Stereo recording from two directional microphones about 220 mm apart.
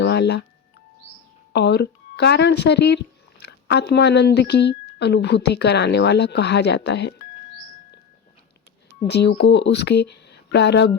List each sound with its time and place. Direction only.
0.0 s a sound: 50° left (ahead or behind)
1.5 s speech: 50° left (ahead or behind)
9.0 s speech: 50° left (ahead or behind)